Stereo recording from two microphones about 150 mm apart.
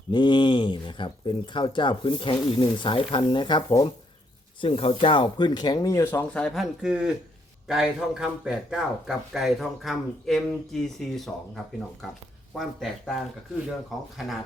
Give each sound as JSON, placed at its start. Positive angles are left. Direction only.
{"t": 0.1, "sound": "speech", "side_deg": 30}
{"t": 4.6, "sound": "speech", "side_deg": 40}
{"t": 14.2, "sound": "speech", "side_deg": 0}